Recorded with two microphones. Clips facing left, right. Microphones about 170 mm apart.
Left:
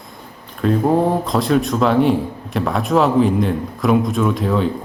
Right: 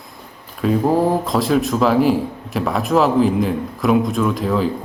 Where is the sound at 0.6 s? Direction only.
5° right (ahead or behind).